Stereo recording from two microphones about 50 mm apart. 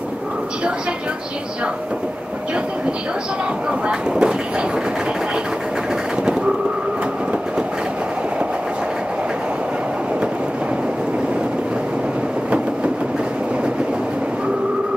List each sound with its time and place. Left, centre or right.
3.8 s speech: centre